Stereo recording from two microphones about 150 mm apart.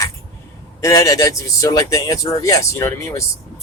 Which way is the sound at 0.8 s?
20° left (ahead or behind).